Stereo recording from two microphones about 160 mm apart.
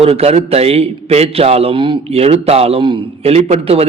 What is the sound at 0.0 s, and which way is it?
A man's voice, 40° right (ahead or behind).